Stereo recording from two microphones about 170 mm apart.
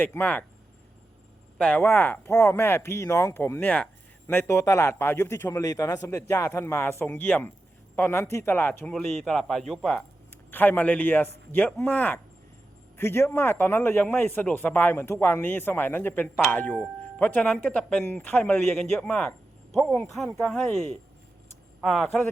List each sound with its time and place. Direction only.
0.0 s a man's voice: 10° left (ahead or behind)
1.5 s a man's voice: 5° left (ahead or behind)